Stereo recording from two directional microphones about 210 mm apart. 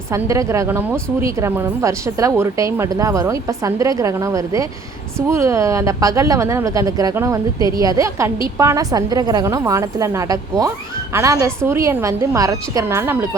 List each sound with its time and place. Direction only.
0.1 s a woman's voice: 15° right (ahead or behind)